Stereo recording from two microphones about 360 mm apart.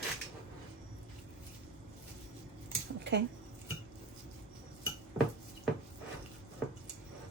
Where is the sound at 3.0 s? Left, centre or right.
Right.